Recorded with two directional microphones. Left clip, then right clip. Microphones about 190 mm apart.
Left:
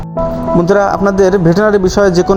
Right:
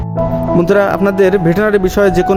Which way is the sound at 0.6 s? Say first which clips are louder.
Left 1 dB; 25° right (ahead or behind).